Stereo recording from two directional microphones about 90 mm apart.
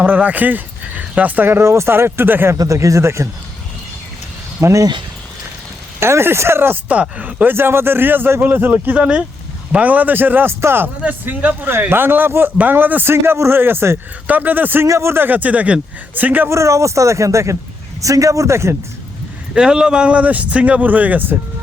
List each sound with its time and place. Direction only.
0.0 s speech: 20° right (ahead or behind)
2.6 s speech: 35° right (ahead or behind)
4.6 s speech: 35° right (ahead or behind)
6.0 s speech: 30° right (ahead or behind)
16.5 s speech: 35° right (ahead or behind)
19.5 s speech: 10° right (ahead or behind)